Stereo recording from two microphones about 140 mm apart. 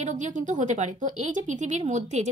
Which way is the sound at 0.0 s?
60° right (ahead or behind).